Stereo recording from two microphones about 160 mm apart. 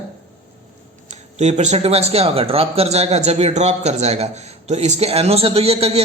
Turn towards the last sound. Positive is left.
turn(degrees=-40)  # may be behind; listen again after turning